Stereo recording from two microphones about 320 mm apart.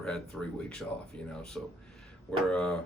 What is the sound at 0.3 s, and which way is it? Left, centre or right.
Speech, centre.